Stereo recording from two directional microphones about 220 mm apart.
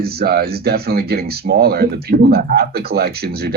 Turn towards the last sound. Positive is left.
turn(degrees=-45)  # may be behind; listen again after turning